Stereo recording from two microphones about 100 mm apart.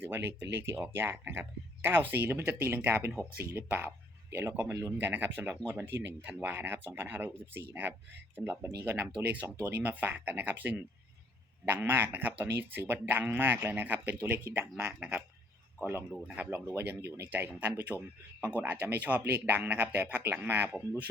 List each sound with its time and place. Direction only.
0.0 s speech: 25° right (ahead or behind)
8.4 s speech: 10° right (ahead or behind); by 14.7 s 25° right (ahead or behind)
14.8 s speech: 15° right (ahead or behind)
15.8 s speech: 25° right (ahead or behind)